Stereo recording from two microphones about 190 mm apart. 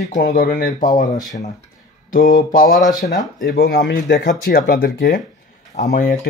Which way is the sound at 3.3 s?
50° left (ahead or behind).